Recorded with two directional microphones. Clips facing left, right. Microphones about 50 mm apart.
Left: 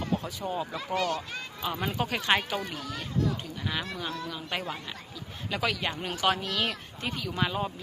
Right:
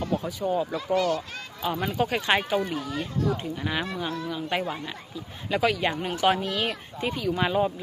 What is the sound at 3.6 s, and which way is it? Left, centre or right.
Speech, centre.